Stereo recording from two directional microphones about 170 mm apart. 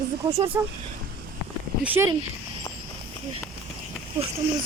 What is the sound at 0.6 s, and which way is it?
Speech, 15° right (ahead or behind).